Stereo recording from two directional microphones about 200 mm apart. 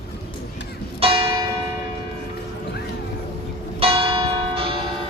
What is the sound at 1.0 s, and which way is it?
Church bell, 25° right (ahead or behind).